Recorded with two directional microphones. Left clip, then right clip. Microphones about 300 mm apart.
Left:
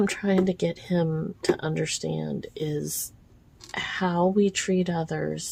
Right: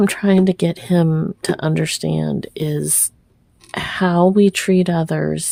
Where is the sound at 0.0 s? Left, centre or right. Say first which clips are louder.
Right 8 dB; right.